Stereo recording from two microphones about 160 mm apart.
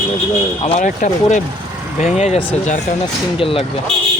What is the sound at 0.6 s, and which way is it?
Speech, 45° left (ahead or behind).